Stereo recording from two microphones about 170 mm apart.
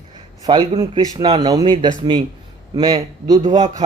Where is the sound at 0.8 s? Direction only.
25° right (ahead or behind).